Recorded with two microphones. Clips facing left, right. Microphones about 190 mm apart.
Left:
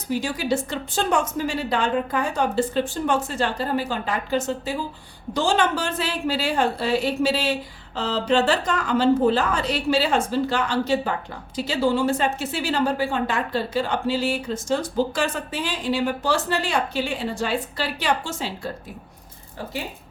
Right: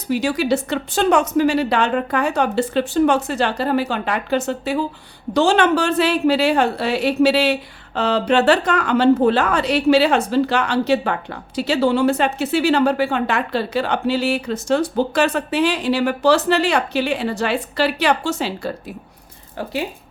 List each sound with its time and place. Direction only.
0.1 s a woman's voice: 70° right (ahead or behind)